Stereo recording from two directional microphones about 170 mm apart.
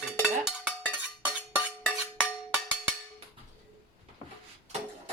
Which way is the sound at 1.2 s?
10° right (ahead or behind).